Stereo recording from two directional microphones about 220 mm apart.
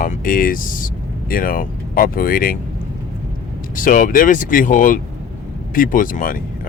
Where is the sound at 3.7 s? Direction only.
35° left (ahead or behind).